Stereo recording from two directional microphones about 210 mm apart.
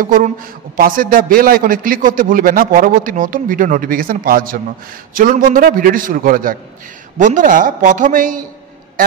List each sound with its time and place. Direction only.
0.0 s a man's voice: 40° right (ahead or behind)